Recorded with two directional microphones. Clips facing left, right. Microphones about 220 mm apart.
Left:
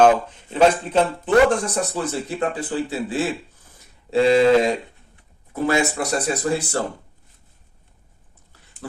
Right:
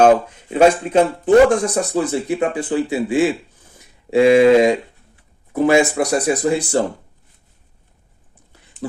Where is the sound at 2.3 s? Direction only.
15° right (ahead or behind).